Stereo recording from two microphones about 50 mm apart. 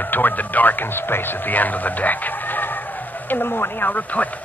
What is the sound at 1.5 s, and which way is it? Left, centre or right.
Speech, left.